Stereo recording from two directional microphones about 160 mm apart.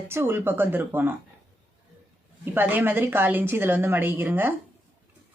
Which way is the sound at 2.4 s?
10° right (ahead or behind).